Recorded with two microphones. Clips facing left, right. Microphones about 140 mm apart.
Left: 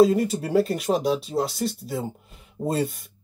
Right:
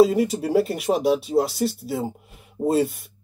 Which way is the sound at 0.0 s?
Centre (ahead or behind).